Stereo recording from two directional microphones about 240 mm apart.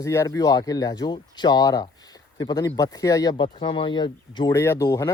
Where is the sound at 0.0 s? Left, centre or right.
Centre.